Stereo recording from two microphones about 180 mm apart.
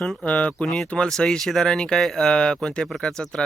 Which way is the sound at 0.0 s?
5° left (ahead or behind).